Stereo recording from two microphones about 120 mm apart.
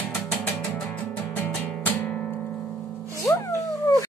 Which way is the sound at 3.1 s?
25° left (ahead or behind).